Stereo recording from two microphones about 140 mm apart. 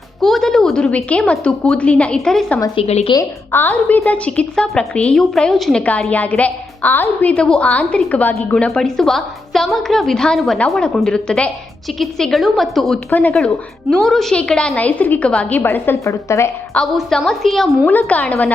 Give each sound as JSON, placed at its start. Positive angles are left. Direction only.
{"t": 0.2, "sound": "a woman's voice", "side_deg": 0}
{"t": 2.7, "sound": "a woman's voice", "side_deg": 45}
{"t": 3.5, "sound": "a woman's voice", "side_deg": 15}
{"t": 13.1, "sound": "a woman's voice", "side_deg": 10}
{"t": 16.7, "sound": "a woman's voice", "side_deg": 5}